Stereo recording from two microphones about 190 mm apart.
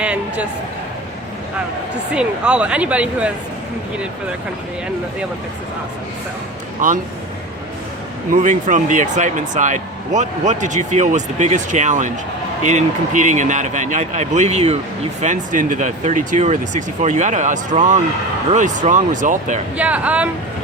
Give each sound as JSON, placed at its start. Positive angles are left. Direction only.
{"t": 0.0, "sound": "a man's voice", "side_deg": -5}
{"t": 2.1, "sound": "speech", "side_deg": -5}
{"t": 6.8, "sound": "speech", "side_deg": -45}
{"t": 8.3, "sound": "speech", "side_deg": -40}
{"t": 19.7, "sound": "speech", "side_deg": -5}